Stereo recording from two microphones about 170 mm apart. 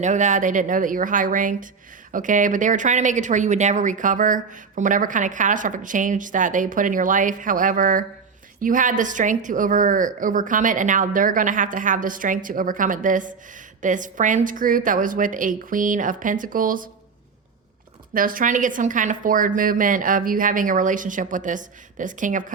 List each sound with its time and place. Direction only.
0.0 s speech: 45° right (ahead or behind)
18.1 s speech: 55° right (ahead or behind)